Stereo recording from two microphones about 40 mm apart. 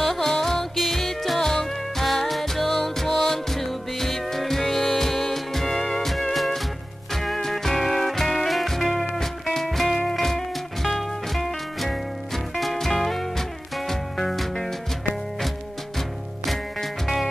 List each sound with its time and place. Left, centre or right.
0.0 s music: centre
16.4 s music: centre